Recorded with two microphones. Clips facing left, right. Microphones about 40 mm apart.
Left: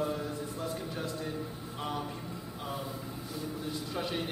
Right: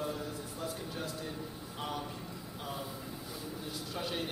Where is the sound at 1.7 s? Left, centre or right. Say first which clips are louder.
Left 3 dB; centre.